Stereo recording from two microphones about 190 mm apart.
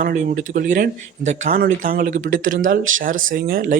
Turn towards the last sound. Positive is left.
turn(degrees=-50)  # may be behind; listen again after turning